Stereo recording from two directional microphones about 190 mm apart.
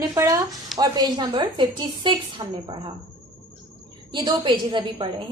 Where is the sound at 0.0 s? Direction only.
20° right (ahead or behind).